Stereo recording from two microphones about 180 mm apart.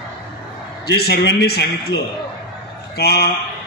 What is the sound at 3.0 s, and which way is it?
Speech, 65° left (ahead or behind).